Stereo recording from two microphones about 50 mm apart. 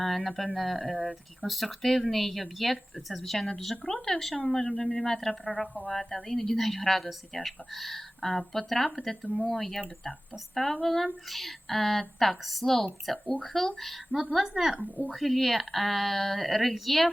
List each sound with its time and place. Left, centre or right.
0.0 s a woman's voice: centre